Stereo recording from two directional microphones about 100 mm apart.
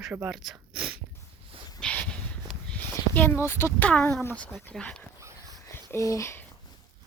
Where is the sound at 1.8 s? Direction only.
10° left (ahead or behind).